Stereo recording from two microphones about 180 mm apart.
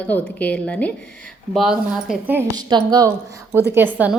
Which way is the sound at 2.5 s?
25° right (ahead or behind).